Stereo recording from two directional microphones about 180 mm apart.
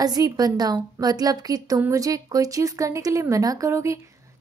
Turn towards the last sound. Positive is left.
turn(degrees=-15)  # may be behind; listen again after turning